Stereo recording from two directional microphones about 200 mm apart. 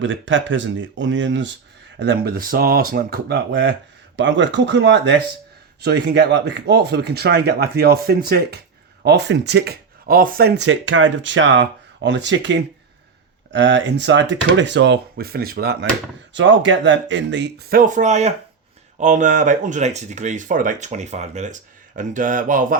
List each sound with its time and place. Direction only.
0.0 s speech: 70° right (ahead or behind)
2.0 s speech: 55° right (ahead or behind)
16.3 s speech: 65° right (ahead or behind); by 22.8 s 40° right (ahead or behind)